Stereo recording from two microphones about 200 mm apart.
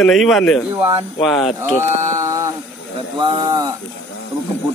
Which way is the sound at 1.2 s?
Centre (ahead or behind).